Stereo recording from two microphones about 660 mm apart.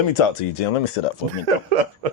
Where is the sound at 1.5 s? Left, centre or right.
Right.